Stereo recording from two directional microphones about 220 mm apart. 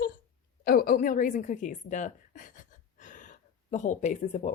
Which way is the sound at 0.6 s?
40° left (ahead or behind).